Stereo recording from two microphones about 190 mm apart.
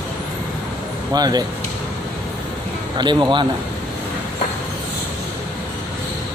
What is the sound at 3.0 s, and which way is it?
Speech, 25° right (ahead or behind).